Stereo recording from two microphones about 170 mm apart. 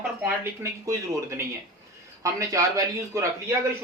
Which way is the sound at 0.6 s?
15° right (ahead or behind).